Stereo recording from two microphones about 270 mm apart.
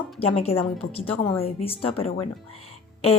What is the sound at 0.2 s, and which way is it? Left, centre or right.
A woman's voice, left.